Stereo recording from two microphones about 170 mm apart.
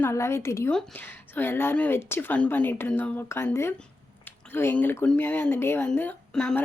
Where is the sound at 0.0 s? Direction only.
15° left (ahead or behind).